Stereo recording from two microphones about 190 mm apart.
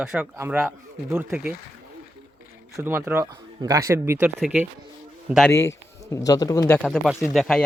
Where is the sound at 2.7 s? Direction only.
10° right (ahead or behind).